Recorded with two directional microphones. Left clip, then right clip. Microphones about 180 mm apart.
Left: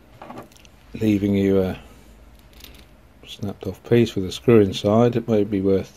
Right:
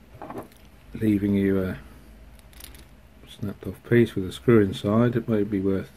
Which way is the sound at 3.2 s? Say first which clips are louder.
Left 5 dB; 15° left (ahead or behind).